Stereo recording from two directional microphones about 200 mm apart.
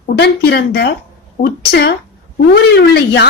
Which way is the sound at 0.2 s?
55° left (ahead or behind).